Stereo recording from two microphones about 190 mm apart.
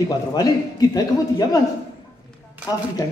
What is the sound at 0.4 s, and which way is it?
A man's voice, 20° left (ahead or behind).